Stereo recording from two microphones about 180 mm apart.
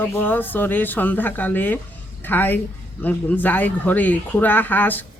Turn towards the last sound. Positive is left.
turn(degrees=10)  # may be behind; listen again after turning